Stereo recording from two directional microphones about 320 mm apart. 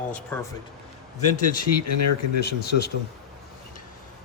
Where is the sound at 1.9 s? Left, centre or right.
Left.